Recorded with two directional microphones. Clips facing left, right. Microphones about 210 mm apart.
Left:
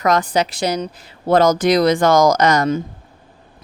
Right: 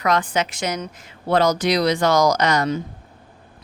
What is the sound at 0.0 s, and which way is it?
Speech, 40° left (ahead or behind).